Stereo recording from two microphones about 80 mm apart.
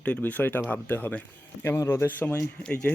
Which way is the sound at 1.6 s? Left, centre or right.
Left.